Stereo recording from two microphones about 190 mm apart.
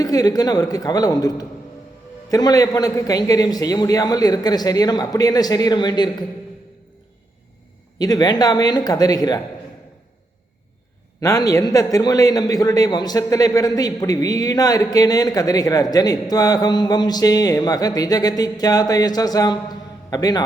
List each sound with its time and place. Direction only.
0.0 s a man's voice: 20° left (ahead or behind)
7.9 s a man's voice: 20° left (ahead or behind)
11.2 s a man's voice: 20° left (ahead or behind)